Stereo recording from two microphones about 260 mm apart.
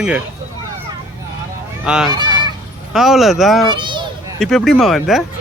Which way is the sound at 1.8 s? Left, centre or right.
Centre.